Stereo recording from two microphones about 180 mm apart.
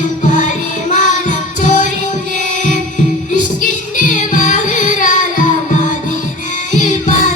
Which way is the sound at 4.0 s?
45° left (ahead or behind).